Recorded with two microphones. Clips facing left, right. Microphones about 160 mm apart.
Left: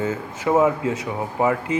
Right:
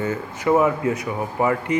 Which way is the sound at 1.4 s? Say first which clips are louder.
Even; 20° left (ahead or behind).